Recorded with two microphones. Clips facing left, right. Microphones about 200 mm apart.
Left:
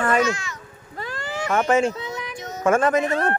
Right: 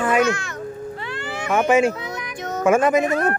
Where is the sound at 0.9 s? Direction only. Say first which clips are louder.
Right 2 dB; 40° left (ahead or behind).